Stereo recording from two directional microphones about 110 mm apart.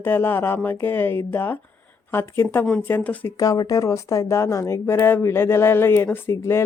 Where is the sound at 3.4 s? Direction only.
35° left (ahead or behind).